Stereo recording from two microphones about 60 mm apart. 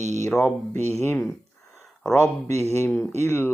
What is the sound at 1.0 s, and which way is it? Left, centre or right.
Speech, left.